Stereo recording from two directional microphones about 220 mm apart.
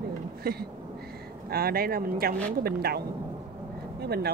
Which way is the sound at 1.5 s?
45° right (ahead or behind).